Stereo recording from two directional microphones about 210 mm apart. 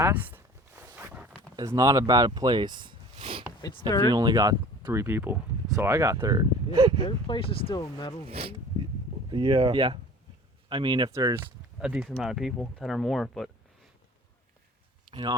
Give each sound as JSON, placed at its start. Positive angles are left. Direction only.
{"t": 0.0, "sound": "walk", "side_deg": -10}
{"t": 1.5, "sound": "speech", "side_deg": -15}
{"t": 3.6, "sound": "speech", "side_deg": 20}
{"t": 4.1, "sound": "speech", "side_deg": -20}
{"t": 7.0, "sound": "speech", "side_deg": 25}
{"t": 8.3, "sound": "speech", "side_deg": -25}
{"t": 11.8, "sound": "speech", "side_deg": -5}
{"t": 15.1, "sound": "speech", "side_deg": -20}